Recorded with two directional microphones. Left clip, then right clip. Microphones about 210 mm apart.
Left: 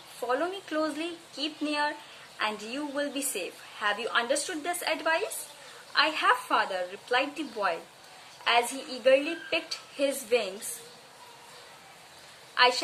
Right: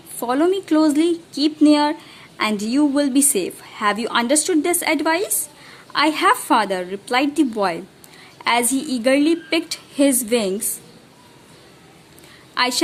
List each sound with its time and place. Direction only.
0.3 s a woman's voice: 50° right (ahead or behind)